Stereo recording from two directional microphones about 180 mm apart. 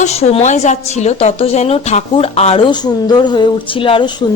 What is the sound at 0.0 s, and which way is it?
A woman's voice, 35° left (ahead or behind).